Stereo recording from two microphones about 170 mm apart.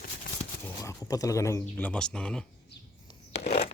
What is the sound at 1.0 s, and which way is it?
Speech, 20° left (ahead or behind).